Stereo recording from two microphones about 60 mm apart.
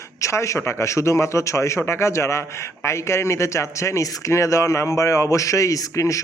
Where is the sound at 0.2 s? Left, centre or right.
Left.